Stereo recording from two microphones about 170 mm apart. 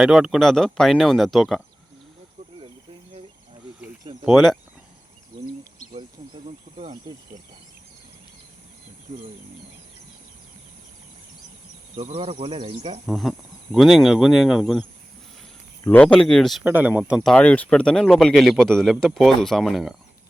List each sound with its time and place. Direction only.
0.0 s speech: 5° right (ahead or behind)
4.3 s speech: centre (ahead or behind)
5.9 s a sound: 30° right (ahead or behind)
6.7 s speech: 45° right (ahead or behind)
11.9 s speech: 35° right (ahead or behind)
13.1 s speech: centre (ahead or behind)
15.8 s speech: 10° left (ahead or behind)
16.6 s speech: 10° right (ahead or behind)
17.3 s speech: 10° left (ahead or behind)